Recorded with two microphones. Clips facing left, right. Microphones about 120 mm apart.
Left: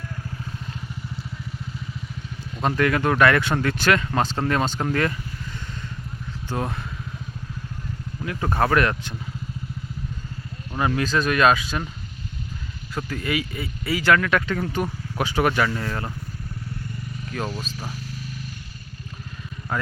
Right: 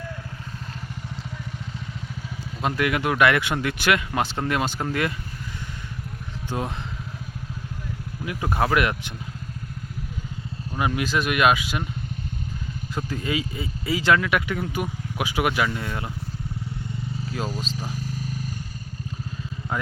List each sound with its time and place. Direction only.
2.6 s speech: 10° right (ahead or behind)
8.2 s speech: 10° right (ahead or behind)
10.8 s speech: 10° right (ahead or behind)
12.9 s speech: 15° right (ahead or behind)
18.0 s a sound: 45° right (ahead or behind)
19.7 s vehicle: 20° right (ahead or behind)